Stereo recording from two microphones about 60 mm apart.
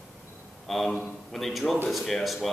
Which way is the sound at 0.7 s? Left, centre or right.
Centre.